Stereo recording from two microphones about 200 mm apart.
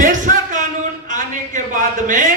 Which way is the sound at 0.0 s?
40° right (ahead or behind).